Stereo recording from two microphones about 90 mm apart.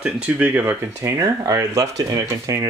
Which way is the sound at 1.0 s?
35° right (ahead or behind).